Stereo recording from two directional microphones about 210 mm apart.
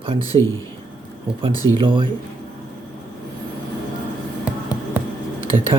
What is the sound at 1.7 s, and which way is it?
Speech, 25° right (ahead or behind).